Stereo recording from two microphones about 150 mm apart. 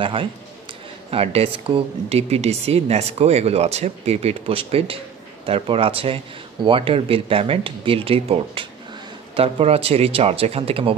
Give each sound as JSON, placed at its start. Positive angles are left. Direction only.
{"t": 0.0, "sound": "speech", "side_deg": -35}